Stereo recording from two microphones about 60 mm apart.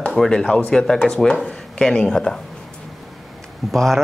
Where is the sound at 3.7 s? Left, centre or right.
Centre.